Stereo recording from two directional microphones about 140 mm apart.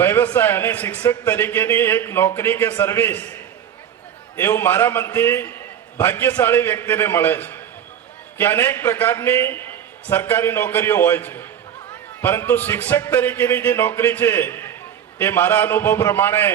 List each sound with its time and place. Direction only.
0.0 s a man's voice: 15° left (ahead or behind)